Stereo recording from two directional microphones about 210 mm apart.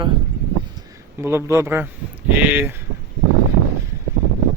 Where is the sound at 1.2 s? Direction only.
10° right (ahead or behind).